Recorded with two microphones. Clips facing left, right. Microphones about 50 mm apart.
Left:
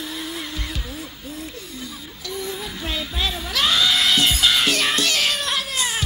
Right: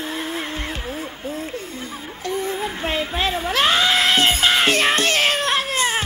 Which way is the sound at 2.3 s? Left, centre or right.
Right.